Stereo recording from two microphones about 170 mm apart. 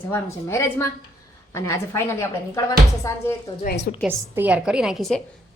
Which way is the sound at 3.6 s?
60° left (ahead or behind).